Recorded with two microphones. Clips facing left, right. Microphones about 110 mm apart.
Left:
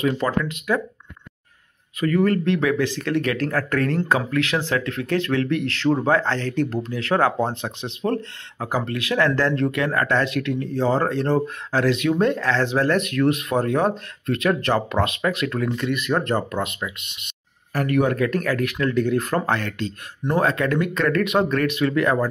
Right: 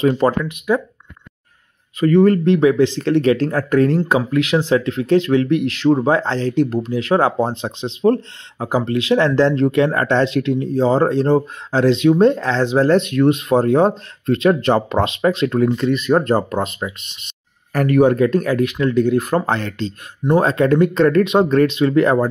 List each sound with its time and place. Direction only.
0.0 s speech: 30° right (ahead or behind)
0.4 s speech: 20° right (ahead or behind)
2.0 s speech: 30° right (ahead or behind)